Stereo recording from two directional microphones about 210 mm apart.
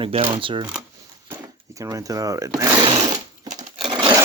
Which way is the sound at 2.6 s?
15° right (ahead or behind).